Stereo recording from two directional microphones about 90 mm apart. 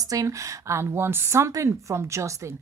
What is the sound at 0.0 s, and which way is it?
Speech, 40° right (ahead or behind).